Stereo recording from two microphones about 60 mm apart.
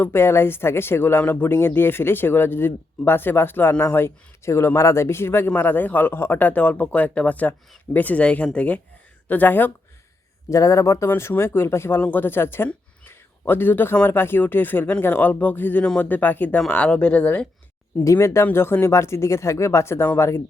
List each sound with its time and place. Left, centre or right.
0.0 s speech: left
10.5 s speech: left
11.2 s speech: left
11.9 s a man's voice: left
15.8 s speech: centre
16.1 s speech: left
16.6 s speech: centre
18.0 s speech: left